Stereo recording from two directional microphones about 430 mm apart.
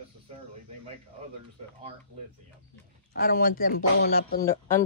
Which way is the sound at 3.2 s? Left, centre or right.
Centre.